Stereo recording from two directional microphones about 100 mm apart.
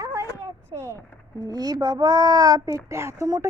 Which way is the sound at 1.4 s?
40° right (ahead or behind).